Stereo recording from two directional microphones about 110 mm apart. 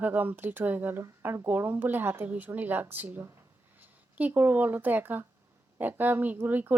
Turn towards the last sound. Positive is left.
turn(degrees=-15)  # may be behind; listen again after turning